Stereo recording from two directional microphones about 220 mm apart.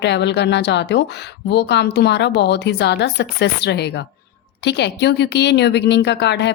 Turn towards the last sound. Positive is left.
turn(degrees=50)  # may be behind; listen again after turning